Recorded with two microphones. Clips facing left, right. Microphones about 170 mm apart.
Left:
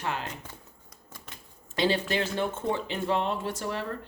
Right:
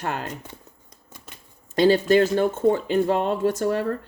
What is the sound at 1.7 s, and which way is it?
Speech, 45° right (ahead or behind).